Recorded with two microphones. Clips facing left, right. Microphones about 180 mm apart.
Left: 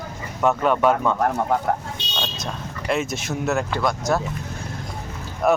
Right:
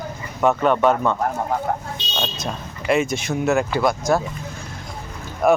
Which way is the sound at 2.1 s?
5° right (ahead or behind).